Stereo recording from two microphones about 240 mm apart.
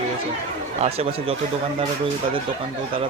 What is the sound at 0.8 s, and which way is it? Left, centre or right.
Speech, right.